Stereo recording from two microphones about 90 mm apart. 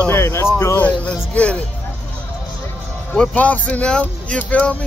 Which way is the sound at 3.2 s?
15° left (ahead or behind).